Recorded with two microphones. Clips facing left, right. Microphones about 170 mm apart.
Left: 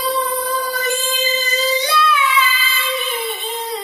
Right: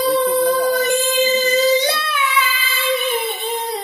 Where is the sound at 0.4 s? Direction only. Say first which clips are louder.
Right 7 dB; 60° right (ahead or behind).